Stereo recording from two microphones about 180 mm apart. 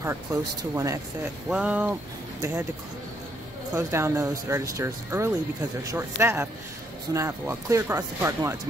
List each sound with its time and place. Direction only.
0.0 s speech: 15° right (ahead or behind)
3.7 s speech: 15° right (ahead or behind)